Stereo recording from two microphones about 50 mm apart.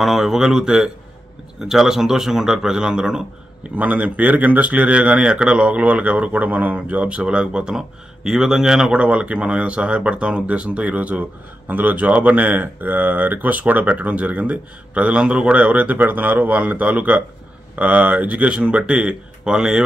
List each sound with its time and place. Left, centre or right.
0.0 s speech: centre
3.7 s speech: right